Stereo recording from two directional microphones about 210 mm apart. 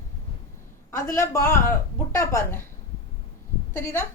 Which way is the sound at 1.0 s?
15° left (ahead or behind).